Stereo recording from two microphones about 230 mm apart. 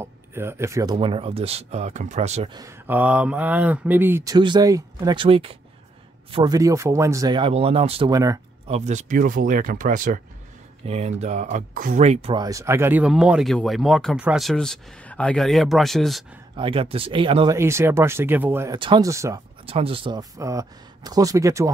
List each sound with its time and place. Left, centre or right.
0.0 s speech: centre
0.9 s speech: right
2.6 s speech: centre
8.6 s speech: right; by 16.3 s centre
16.5 s speech: right
19.6 s speech: right